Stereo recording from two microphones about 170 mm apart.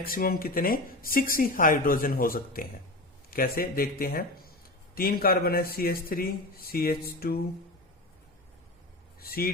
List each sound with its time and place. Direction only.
0.0 s speech: 60° left (ahead or behind)
9.2 s speech: 60° left (ahead or behind)